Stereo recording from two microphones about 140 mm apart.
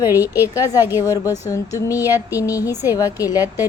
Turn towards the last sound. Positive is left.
turn(degrees=-15)  # may be behind; listen again after turning